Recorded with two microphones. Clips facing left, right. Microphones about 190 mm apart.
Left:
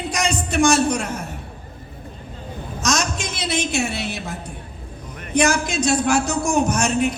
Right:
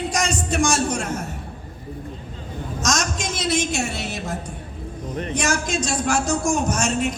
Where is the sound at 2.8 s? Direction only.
60° left (ahead or behind).